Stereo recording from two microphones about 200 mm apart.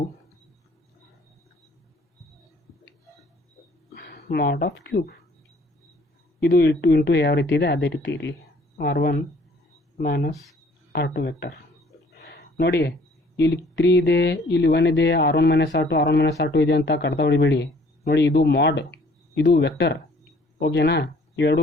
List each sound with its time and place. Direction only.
3.9 s speech: 55° left (ahead or behind)
6.4 s speech: 55° left (ahead or behind)
12.1 s a sound: 55° left (ahead or behind)
13.3 s speech: 60° left (ahead or behind)